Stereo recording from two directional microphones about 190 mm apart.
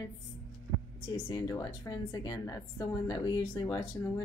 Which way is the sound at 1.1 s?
20° left (ahead or behind).